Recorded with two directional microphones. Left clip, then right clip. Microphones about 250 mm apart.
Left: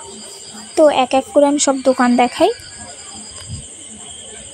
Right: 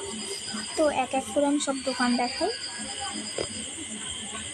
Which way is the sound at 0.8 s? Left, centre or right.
Left.